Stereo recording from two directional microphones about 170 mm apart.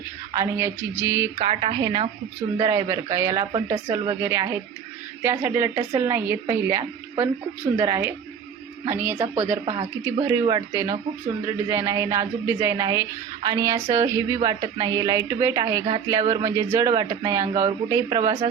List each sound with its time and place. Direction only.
0.3 s a woman's voice: 15° right (ahead or behind)
1.4 s a woman's voice: 30° right (ahead or behind); by 9.1 s 10° right (ahead or behind)
9.1 s a woman's voice: 35° right (ahead or behind)
10.0 s a woman's voice: 15° right (ahead or behind)